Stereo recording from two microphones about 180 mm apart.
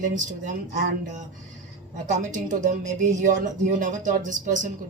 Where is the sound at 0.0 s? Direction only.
45° right (ahead or behind).